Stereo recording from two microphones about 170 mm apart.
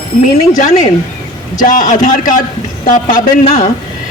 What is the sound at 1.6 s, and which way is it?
Speech, 50° left (ahead or behind).